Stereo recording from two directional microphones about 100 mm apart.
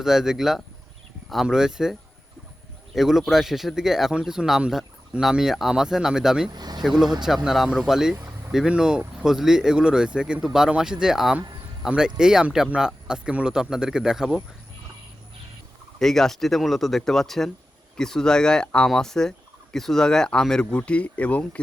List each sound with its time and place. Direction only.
0.0 s speech: 5° right (ahead or behind)
6.5 s speech: 45° right (ahead or behind)
6.8 s speech: 5° right (ahead or behind)
16.0 s speech: 5° left (ahead or behind)